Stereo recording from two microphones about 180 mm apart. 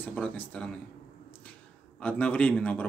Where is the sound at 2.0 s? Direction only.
5° left (ahead or behind).